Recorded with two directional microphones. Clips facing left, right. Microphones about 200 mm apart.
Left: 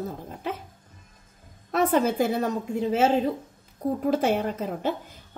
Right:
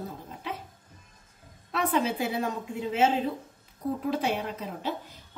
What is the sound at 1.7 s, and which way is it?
A woman's voice, 45° left (ahead or behind).